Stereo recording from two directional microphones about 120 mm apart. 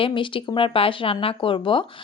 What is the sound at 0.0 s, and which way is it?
A woman's voice, 45° left (ahead or behind).